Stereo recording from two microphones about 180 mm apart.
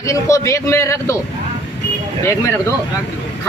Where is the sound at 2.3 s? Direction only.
15° left (ahead or behind).